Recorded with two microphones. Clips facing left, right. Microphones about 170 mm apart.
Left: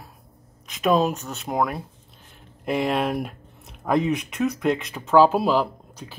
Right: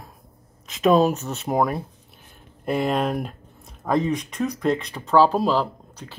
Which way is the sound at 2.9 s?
10° left (ahead or behind).